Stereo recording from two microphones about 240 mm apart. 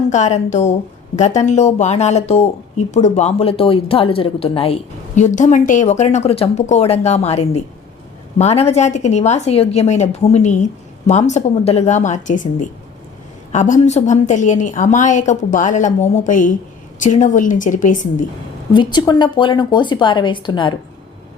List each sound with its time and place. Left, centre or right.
0.1 s a woman's voice: left
18.7 s speech: centre